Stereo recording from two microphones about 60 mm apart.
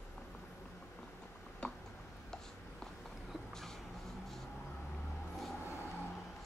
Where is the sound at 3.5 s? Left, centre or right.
Centre.